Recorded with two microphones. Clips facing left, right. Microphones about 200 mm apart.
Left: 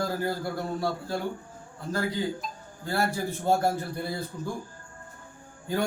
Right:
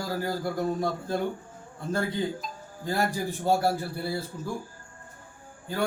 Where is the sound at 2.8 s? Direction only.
15° right (ahead or behind).